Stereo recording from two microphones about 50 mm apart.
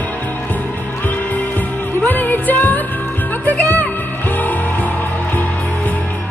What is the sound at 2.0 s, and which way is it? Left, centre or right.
Music, left.